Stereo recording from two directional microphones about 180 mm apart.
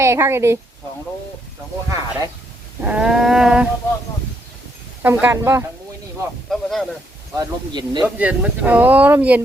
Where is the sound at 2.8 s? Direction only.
5° right (ahead or behind).